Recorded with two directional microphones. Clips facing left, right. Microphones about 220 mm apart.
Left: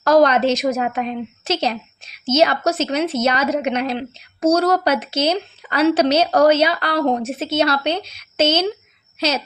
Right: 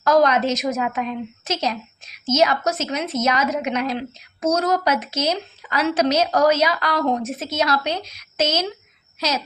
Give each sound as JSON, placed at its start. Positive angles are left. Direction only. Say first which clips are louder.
{"t": 0.0, "sound": "a woman's voice", "louder": "left 3 dB", "side_deg": 35}